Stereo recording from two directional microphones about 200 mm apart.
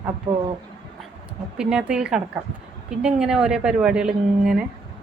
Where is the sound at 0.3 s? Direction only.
20° right (ahead or behind).